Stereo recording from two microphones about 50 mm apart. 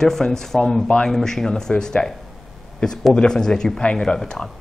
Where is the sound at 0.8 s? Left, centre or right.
Centre.